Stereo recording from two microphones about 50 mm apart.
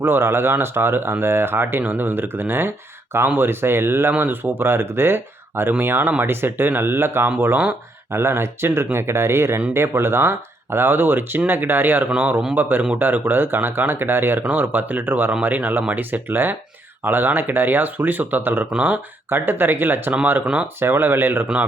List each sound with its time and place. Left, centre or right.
0.0 s speech: right
1.8 s speech: right
8.1 s speech: right
14.4 s speech: right